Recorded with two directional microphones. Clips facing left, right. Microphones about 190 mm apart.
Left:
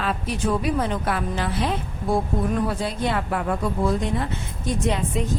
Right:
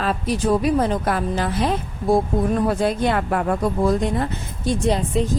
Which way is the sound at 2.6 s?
55° right (ahead or behind).